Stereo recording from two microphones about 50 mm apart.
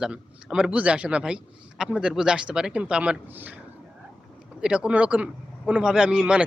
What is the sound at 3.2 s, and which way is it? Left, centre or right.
Speech, right.